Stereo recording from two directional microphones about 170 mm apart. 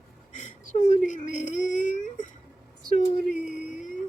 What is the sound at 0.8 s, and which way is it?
Whimper, 45° left (ahead or behind).